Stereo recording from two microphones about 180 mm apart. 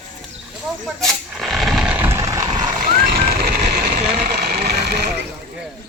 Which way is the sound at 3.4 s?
60° right (ahead or behind).